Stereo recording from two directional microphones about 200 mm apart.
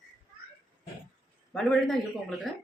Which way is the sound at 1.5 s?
5° left (ahead or behind).